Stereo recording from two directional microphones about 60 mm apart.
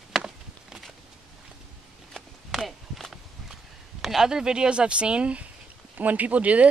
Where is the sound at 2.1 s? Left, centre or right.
Centre.